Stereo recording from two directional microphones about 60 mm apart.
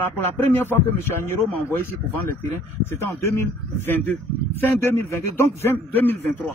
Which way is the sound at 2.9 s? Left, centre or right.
Left.